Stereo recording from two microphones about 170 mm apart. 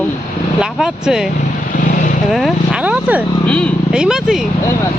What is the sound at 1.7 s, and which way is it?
Vehicle, 55° left (ahead or behind).